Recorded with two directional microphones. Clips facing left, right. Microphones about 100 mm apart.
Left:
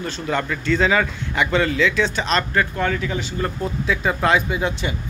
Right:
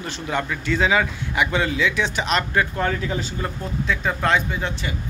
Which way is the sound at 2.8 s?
30° right (ahead or behind).